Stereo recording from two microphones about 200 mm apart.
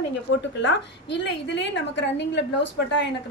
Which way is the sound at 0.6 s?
60° left (ahead or behind).